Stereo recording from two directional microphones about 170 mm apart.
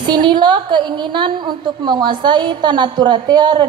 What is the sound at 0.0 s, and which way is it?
A woman's voice, 25° right (ahead or behind).